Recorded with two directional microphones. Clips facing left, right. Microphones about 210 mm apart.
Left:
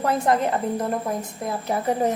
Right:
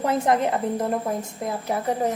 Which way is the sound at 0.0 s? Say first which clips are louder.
Even; 20° right (ahead or behind).